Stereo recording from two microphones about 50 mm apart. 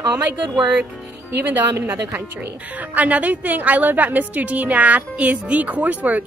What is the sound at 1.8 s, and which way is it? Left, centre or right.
Speech, right.